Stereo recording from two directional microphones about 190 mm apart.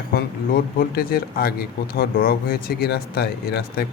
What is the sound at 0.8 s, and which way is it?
Speech, 50° left (ahead or behind).